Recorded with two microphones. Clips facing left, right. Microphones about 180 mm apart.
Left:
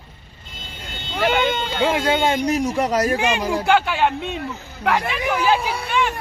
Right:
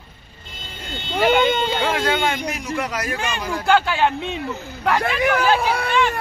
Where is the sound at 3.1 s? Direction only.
15° left (ahead or behind).